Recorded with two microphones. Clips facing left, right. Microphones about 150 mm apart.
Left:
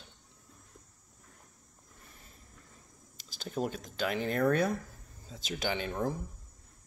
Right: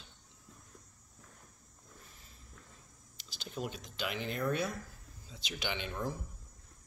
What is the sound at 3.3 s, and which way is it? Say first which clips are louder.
A man's voice: left 6 dB; 45° left (ahead or behind).